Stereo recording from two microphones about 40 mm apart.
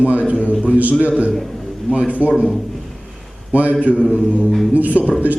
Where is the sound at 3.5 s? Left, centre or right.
Right.